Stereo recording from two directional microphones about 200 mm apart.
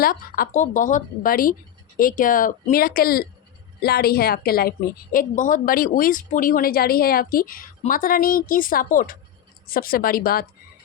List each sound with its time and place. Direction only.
0.0 s a woman's voice: 45° left (ahead or behind)